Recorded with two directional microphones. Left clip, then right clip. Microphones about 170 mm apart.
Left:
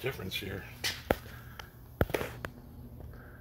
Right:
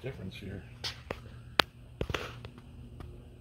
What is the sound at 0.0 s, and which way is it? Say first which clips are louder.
Speech: left 7 dB; 20° left (ahead or behind).